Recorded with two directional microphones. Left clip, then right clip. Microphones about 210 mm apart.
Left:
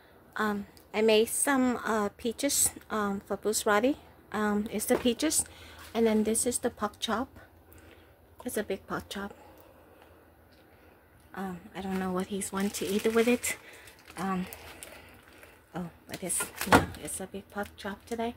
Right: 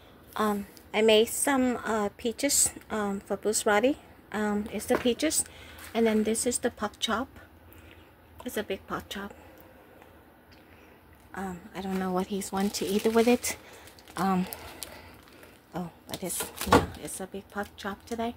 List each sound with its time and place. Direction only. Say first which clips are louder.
0.3 s a woman's voice: right 3 dB; 5° right (ahead or behind)
4.6 s a woman's voice: right 1 dB; 10° left (ahead or behind)
8.5 s a woman's voice: even; 5° left (ahead or behind)
11.3 s a woman's voice: right 2 dB; centre (ahead or behind)
14.1 s speech: right 6 dB; 20° right (ahead or behind)
15.7 s a woman's voice: right 3 dB; centre (ahead or behind)